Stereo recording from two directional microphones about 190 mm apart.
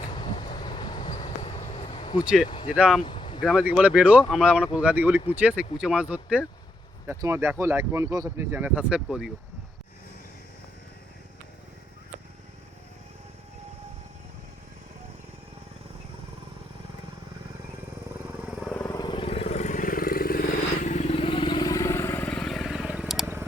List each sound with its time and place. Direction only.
0.0 s vehicle: 25° left (ahead or behind)
2.7 s speech: 5° right (ahead or behind)
3.0 s a sound: 25° left (ahead or behind)
3.4 s speech: 5° right (ahead or behind)
18.4 s vehicle: 5° right (ahead or behind)
18.7 s vehicle: 10° left (ahead or behind)
18.9 s vehicle: 25° left (ahead or behind); by 20.4 s 50° left (ahead or behind)
20.8 s vehicle: 40° left (ahead or behind); by 23.5 s 10° right (ahead or behind)